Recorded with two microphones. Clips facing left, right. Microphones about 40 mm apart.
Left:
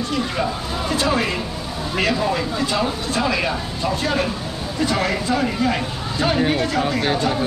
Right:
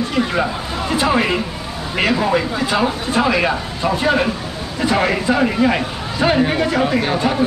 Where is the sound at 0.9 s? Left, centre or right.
Right.